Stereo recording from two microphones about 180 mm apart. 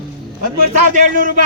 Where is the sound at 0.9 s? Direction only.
50° right (ahead or behind).